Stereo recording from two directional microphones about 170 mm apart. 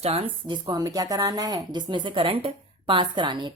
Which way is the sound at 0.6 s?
20° right (ahead or behind).